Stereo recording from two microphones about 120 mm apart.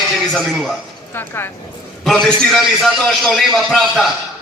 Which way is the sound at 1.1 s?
20° left (ahead or behind).